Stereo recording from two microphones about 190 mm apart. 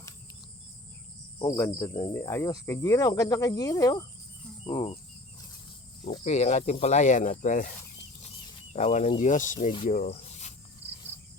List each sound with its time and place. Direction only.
1.4 s cricket: 15° left (ahead or behind)
2.1 s speech: 15° left (ahead or behind)
4.6 s speech: 35° left (ahead or behind)
6.2 s speech: 35° left (ahead or behind)
8.7 s speech: 35° left (ahead or behind)
9.9 s rub: 40° left (ahead or behind)
10.8 s cricket: 30° right (ahead or behind)